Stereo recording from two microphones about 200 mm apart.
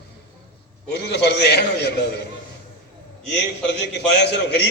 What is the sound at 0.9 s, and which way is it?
A man's voice, 55° left (ahead or behind).